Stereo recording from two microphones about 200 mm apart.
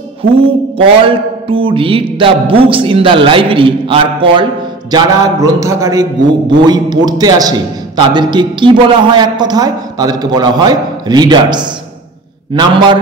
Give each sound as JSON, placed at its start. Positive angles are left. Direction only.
{"t": 0.2, "sound": "a man's voice", "side_deg": -30}
{"t": 4.9, "sound": "a sound", "side_deg": -20}
{"t": 6.6, "sound": "a man's voice", "side_deg": -20}